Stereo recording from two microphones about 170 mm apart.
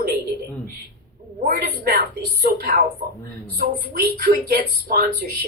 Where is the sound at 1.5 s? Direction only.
65° right (ahead or behind).